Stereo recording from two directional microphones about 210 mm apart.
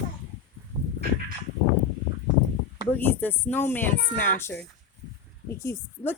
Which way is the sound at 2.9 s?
10° left (ahead or behind).